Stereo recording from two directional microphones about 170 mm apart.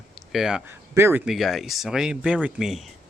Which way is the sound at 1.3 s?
Centre (ahead or behind).